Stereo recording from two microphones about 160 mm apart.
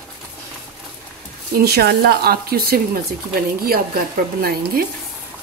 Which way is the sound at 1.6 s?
80° right.